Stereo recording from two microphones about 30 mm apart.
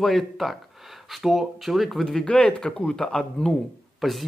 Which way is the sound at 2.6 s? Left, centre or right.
Left.